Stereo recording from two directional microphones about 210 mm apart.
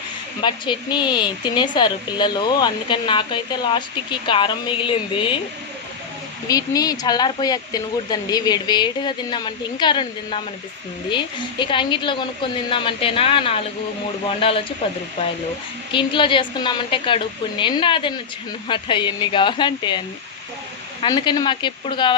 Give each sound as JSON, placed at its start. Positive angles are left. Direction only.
{"t": 0.4, "sound": "speech", "side_deg": 20}
{"t": 6.5, "sound": "speech", "side_deg": 15}
{"t": 15.9, "sound": "speech", "side_deg": 25}
{"t": 21.0, "sound": "speech", "side_deg": 20}